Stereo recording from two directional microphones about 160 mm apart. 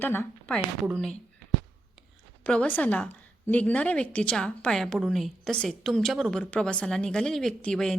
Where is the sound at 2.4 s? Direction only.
10° left (ahead or behind).